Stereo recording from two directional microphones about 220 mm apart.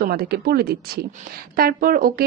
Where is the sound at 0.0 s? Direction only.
45° right (ahead or behind).